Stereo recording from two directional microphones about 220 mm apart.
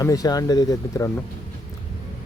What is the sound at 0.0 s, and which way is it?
Speech, 15° left (ahead or behind).